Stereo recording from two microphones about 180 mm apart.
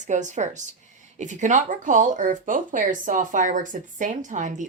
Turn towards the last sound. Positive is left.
turn(degrees=-45)  # may be behind; listen again after turning